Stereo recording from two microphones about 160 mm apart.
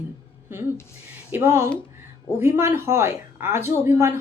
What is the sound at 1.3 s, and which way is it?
Speech, 15° right (ahead or behind).